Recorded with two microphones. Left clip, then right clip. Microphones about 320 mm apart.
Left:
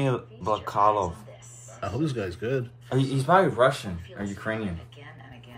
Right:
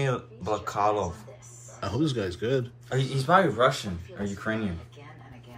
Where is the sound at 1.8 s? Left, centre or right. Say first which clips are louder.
Right 1 dB; centre.